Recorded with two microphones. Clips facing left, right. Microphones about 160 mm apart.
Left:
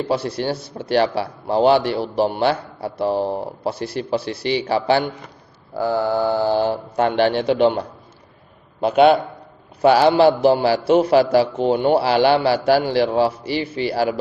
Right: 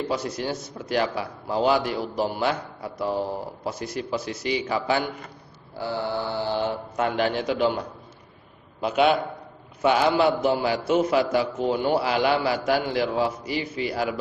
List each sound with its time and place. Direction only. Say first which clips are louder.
0.0 s a man's voice: left 6 dB; 30° left (ahead or behind)
5.9 s a man's voice: left 8 dB; 45° left (ahead or behind); by 7.9 s 30° left (ahead or behind)
9.8 s a man's voice: left 7 dB; 35° left (ahead or behind)